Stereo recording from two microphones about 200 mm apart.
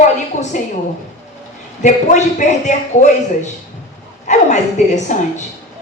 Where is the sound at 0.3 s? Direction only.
35° left (ahead or behind).